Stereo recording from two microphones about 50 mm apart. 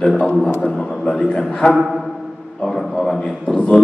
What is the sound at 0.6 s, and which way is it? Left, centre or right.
A man's voice, centre.